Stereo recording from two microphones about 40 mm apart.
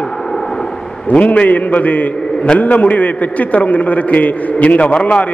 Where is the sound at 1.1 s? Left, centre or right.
Left.